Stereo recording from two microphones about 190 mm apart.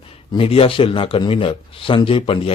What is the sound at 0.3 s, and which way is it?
A man's voice, 30° left (ahead or behind).